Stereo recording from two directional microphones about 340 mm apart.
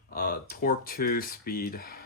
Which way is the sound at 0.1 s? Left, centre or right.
Left.